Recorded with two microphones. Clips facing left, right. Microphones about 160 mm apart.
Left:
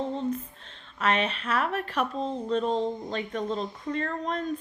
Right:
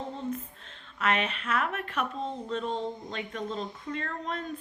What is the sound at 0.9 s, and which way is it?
Speech, 35° left (ahead or behind).